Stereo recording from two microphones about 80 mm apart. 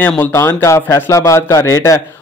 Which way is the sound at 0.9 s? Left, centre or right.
Left.